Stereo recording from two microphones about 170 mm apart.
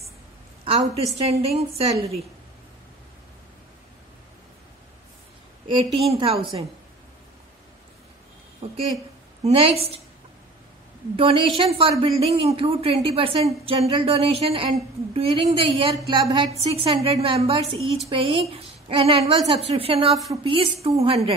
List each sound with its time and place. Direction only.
0.9 s a woman's voice: 35° right (ahead or behind)
5.7 s a woman's voice: 30° right (ahead or behind)
9.4 s a woman's voice: 35° right (ahead or behind)
11.1 s a woman's voice: 35° right (ahead or behind)